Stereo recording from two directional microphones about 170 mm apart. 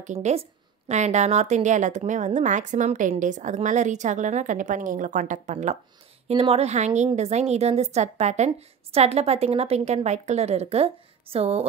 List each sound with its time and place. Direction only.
0.0 s a woman's voice: 40° right (ahead or behind)